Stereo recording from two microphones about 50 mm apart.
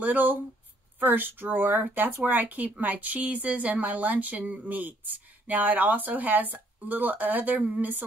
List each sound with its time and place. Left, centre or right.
0.0 s speech: right